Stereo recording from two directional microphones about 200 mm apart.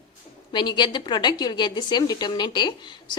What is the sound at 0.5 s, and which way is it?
A woman's voice, 20° left (ahead or behind).